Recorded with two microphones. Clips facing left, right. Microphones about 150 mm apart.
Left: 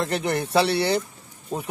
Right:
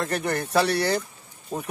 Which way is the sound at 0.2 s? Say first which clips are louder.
Left 1 dB; 25° left (ahead or behind).